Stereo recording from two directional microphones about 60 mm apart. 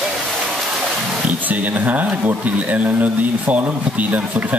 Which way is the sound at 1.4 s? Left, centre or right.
Right.